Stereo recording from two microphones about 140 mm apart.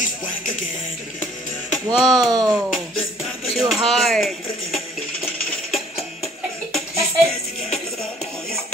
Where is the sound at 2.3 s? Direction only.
30° right (ahead or behind).